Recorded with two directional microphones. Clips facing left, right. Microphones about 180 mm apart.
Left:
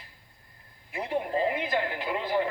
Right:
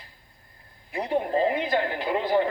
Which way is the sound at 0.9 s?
35° right (ahead or behind).